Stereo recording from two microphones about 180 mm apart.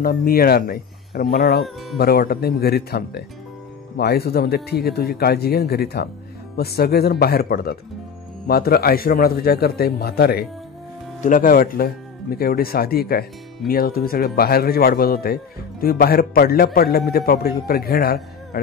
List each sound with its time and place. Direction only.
0.0 s a man's voice: 55° left (ahead or behind)
1.6 s speech: centre (ahead or behind)
2.0 s a man's voice: 60° left (ahead or behind)
11.1 s a man's voice: 45° left (ahead or behind)